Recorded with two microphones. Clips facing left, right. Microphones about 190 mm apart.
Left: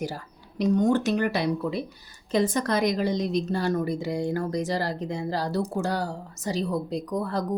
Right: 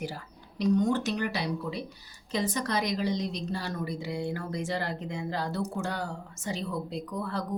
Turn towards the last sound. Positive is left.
turn(degrees=40)  # may be behind; listen again after turning